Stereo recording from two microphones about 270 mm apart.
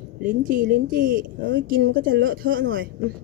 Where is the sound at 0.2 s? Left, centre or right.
Right.